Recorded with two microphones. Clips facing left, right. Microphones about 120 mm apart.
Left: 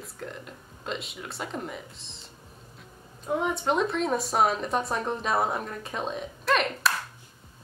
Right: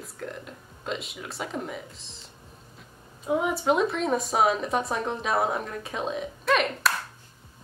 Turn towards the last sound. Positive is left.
turn(degrees=0)  # may be behind; listen again after turning